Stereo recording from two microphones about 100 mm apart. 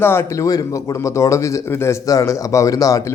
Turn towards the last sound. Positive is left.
turn(degrees=35)  # may be behind; listen again after turning